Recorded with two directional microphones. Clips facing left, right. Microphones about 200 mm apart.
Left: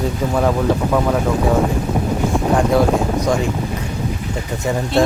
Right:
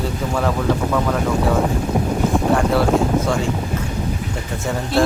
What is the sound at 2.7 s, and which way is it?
Speech, 15° left (ahead or behind).